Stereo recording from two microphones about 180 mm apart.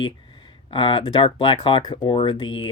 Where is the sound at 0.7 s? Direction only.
30° left (ahead or behind).